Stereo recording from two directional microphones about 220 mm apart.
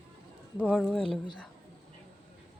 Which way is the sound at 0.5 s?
5° left (ahead or behind).